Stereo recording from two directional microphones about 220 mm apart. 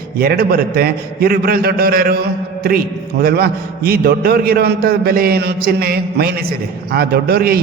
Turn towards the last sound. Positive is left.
turn(degrees=-45)  # may be behind; listen again after turning